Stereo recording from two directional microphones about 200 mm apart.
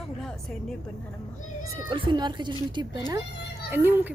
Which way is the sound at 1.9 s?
20° right (ahead or behind).